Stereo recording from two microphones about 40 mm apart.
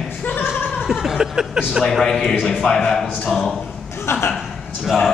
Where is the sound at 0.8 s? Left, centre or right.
Centre.